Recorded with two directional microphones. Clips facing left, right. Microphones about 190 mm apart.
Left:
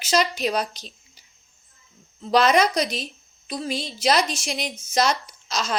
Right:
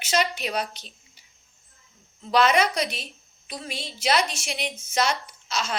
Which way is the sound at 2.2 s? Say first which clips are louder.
Left 2 dB; 40° left (ahead or behind).